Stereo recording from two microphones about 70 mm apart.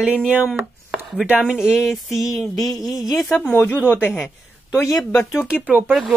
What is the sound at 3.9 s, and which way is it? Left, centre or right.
Speech, left.